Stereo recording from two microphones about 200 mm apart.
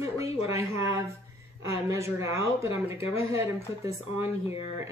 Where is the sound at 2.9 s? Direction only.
30° left (ahead or behind).